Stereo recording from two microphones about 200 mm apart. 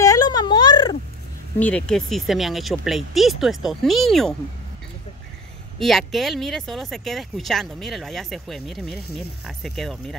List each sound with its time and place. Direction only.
0.0 s a sound: 15° left (ahead or behind)
1.6 s speech: 5° left (ahead or behind)
5.8 s speech: centre (ahead or behind)